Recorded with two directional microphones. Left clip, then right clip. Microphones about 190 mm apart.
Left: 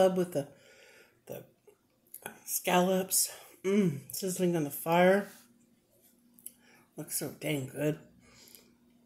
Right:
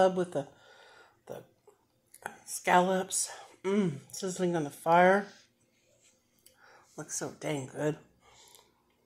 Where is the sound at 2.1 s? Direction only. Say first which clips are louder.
Even; centre (ahead or behind).